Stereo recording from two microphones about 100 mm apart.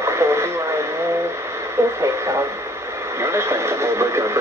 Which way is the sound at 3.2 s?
25° right (ahead or behind).